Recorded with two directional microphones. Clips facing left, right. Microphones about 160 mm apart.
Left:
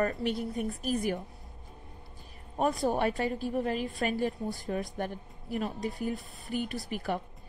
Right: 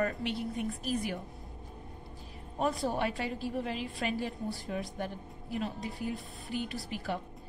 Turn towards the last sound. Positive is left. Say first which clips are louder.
# left 3 dB
turn(degrees=50)  # may be behind; listen again after turning